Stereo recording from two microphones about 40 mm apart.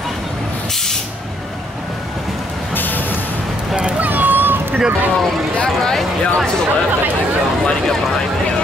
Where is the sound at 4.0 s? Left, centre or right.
Right.